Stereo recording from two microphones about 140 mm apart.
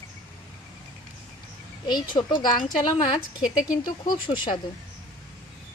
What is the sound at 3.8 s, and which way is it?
Speech, 30° left (ahead or behind).